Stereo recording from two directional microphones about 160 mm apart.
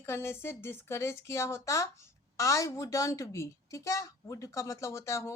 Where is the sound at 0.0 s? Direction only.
15° left (ahead or behind).